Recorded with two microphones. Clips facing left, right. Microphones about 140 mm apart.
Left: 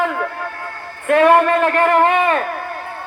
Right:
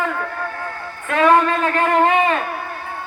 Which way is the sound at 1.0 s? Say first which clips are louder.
Left 3 dB; 55° left (ahead or behind).